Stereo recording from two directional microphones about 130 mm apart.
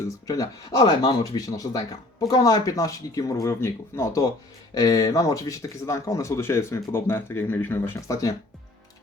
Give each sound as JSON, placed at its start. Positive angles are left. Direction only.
{"t": 0.3, "sound": "speech", "side_deg": 25}